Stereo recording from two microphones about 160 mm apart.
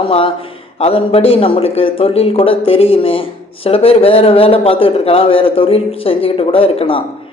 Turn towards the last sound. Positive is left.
turn(degrees=35)  # may be behind; listen again after turning